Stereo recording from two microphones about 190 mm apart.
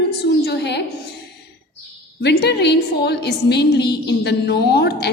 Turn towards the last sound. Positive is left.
turn(degrees=60)  # may be behind; listen again after turning